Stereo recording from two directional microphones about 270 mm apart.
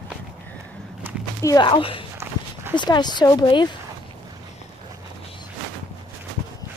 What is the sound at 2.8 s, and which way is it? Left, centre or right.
Speech, centre.